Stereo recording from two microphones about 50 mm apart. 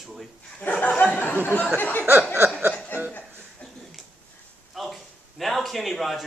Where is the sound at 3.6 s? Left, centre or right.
Left.